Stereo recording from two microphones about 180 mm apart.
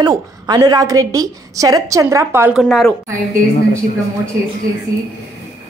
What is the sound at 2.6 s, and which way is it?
Speech, centre (ahead or behind).